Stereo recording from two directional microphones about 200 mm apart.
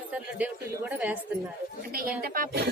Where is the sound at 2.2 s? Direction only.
45° right (ahead or behind).